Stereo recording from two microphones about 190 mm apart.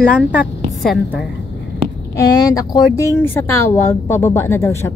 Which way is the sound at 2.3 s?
20° left (ahead or behind).